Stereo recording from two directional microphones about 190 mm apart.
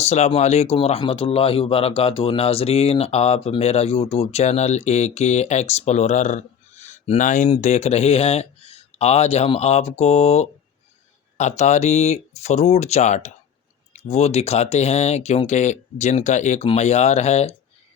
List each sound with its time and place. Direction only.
0.0 s speech: 35° left (ahead or behind)